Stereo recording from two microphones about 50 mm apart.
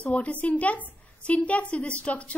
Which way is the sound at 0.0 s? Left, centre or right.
Left.